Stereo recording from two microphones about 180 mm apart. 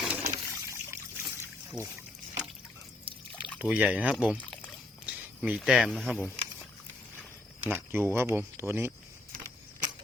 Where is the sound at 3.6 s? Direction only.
10° right (ahead or behind).